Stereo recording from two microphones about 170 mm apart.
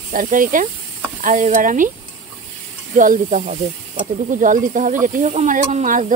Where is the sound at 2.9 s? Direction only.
50° right (ahead or behind).